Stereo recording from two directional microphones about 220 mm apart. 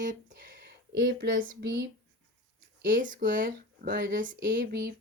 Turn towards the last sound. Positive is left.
turn(degrees=-40)  # may be behind; listen again after turning